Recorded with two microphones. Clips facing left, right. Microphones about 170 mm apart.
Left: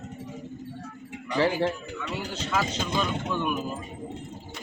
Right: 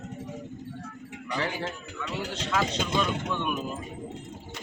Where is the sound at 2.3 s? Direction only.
5° left (ahead or behind).